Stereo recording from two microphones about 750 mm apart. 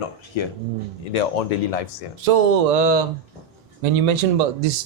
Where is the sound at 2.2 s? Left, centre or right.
Right.